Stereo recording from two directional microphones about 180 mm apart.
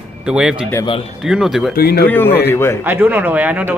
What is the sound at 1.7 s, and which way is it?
Speech, 60° left (ahead or behind).